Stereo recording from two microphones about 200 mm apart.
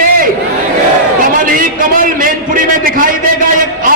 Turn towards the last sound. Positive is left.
turn(degrees=-40)  # may be behind; listen again after turning